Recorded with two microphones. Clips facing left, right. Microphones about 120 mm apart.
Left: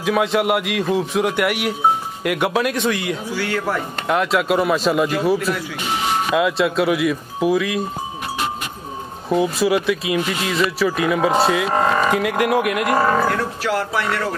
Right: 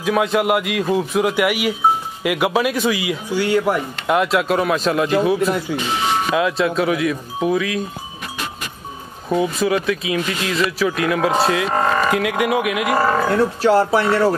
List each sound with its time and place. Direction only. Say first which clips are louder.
0.0 s speech: even; centre (ahead or behind)
3.3 s speech: right 7 dB; 15° right (ahead or behind)
4.1 s speech: right 1 dB; centre (ahead or behind)
9.3 s speech: left 1 dB; centre (ahead or behind)
13.3 s speech: right 6 dB; 30° right (ahead or behind)